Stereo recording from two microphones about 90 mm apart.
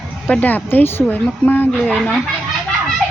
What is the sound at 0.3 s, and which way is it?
Speech, 20° left (ahead or behind).